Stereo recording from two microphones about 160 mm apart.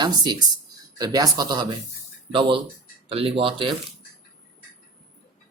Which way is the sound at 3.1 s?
35° right (ahead or behind).